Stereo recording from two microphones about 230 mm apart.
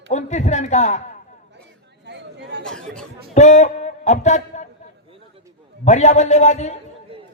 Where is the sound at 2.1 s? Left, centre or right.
Right.